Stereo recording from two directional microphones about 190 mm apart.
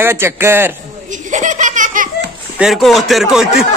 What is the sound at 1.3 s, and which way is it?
Laughter, 40° right (ahead or behind).